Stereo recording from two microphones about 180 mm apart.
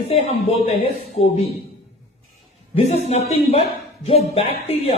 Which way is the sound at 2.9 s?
35° left (ahead or behind).